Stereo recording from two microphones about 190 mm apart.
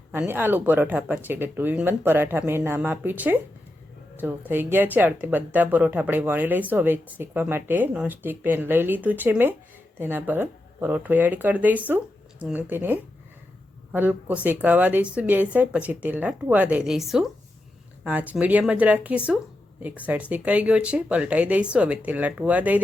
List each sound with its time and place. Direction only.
0.1 s speech: 10° right (ahead or behind)